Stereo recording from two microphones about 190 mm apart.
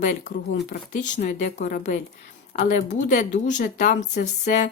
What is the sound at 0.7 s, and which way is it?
Speech, 40° left (ahead or behind).